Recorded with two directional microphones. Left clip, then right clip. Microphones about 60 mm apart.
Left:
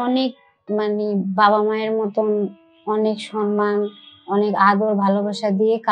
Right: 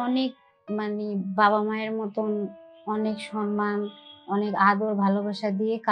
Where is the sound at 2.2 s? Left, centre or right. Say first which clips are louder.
Left 9 dB; centre.